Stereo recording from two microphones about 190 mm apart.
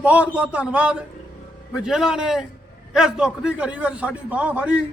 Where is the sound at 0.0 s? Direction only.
5° right (ahead or behind).